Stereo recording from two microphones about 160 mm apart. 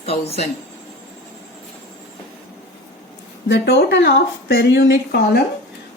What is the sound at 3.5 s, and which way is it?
Speech, 90° left.